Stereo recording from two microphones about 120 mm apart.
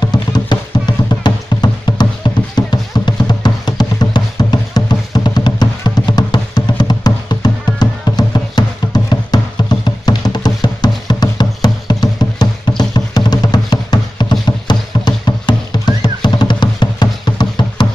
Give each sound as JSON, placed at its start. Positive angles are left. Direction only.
{"t": 0.0, "sound": "music", "side_deg": 35}